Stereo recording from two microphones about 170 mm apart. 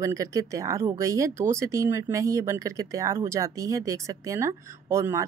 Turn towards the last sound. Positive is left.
turn(degrees=-15)  # may be behind; listen again after turning